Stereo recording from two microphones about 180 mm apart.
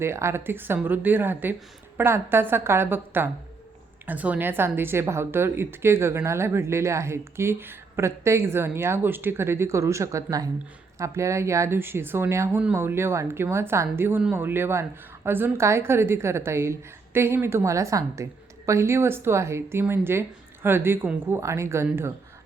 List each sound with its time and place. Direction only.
0.0 s a woman's voice: 15° right (ahead or behind)